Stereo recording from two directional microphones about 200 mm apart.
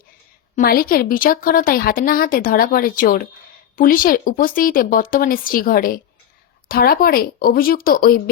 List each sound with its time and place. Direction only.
0.5 s a woman's voice: 45° left (ahead or behind)